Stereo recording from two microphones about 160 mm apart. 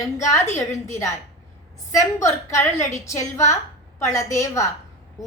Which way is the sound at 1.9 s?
20° left (ahead or behind).